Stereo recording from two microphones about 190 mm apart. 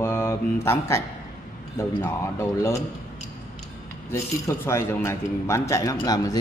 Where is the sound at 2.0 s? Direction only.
15° left (ahead or behind).